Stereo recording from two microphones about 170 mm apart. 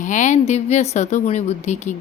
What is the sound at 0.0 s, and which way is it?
Speech, 45° left (ahead or behind).